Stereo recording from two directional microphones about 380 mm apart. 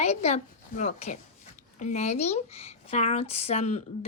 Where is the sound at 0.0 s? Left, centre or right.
Centre.